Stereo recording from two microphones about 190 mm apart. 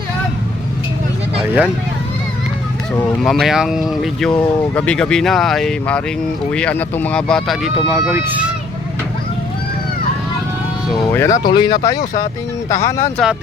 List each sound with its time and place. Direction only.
1.4 s speech: 5° right (ahead or behind)
3.2 s speech: centre (ahead or behind)
7.9 s speech: 15° right (ahead or behind)
11.1 s speech: 15° left (ahead or behind)